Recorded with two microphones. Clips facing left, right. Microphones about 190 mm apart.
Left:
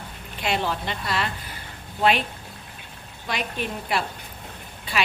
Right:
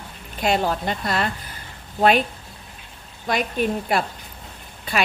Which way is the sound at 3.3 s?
45° right (ahead or behind).